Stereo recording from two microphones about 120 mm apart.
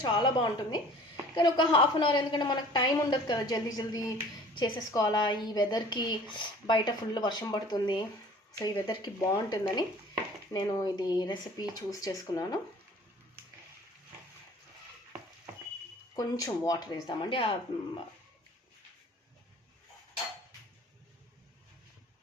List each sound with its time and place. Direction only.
0.0 s a woman's voice: 35° left (ahead or behind)
16.1 s a woman's voice: 30° left (ahead or behind)